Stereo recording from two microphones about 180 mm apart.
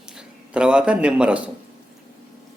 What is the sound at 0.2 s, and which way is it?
Speech, 5° right (ahead or behind).